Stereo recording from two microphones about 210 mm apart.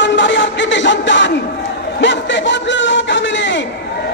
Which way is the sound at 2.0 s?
60° left (ahead or behind).